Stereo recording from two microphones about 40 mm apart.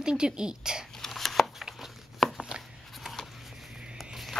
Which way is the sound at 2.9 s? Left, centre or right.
Centre.